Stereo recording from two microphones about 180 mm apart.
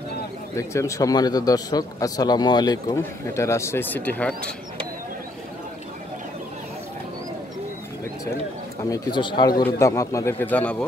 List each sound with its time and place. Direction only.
0.6 s a man's voice: 15° left (ahead or behind)
8.9 s speech: 25° left (ahead or behind); by 10.8 s 10° left (ahead or behind)